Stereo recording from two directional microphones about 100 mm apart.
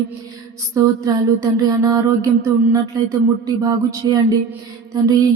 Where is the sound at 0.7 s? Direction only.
35° right (ahead or behind).